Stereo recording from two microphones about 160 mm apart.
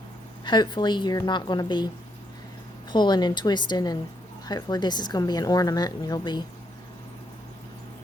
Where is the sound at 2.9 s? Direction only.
25° left (ahead or behind).